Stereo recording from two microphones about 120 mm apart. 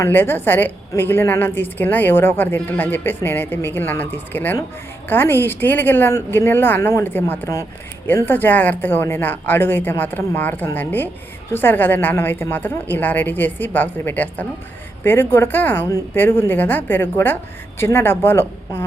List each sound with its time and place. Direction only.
0.0 s a woman's voice: 15° left (ahead or behind)